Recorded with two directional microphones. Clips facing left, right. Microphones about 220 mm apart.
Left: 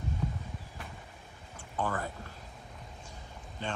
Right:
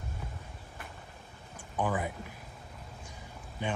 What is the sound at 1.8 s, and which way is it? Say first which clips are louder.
Speech: right 2 dB; 15° right (ahead or behind).